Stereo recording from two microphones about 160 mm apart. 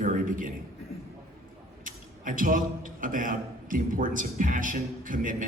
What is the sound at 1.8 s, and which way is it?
A man's voice, 55° right (ahead or behind).